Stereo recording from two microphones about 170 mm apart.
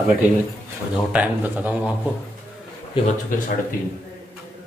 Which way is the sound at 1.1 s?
10° right (ahead or behind).